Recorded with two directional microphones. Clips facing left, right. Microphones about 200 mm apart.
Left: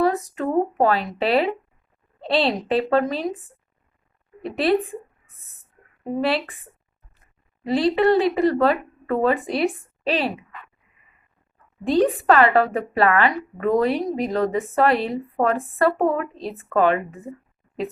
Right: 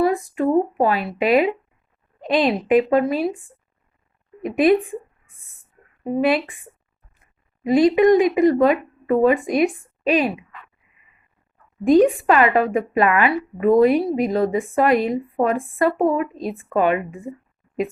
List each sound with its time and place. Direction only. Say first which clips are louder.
0.3 s a woman's voice: right 3 dB; 10° right (ahead or behind)
4.9 s a sound: right 3 dB; 15° right (ahead or behind)
6.1 s a woman's voice: right 4 dB; 15° right (ahead or behind)
11.9 s a woman's voice: right 4 dB; 10° right (ahead or behind)